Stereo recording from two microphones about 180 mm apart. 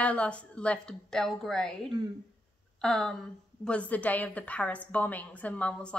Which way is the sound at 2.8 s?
5° left (ahead or behind).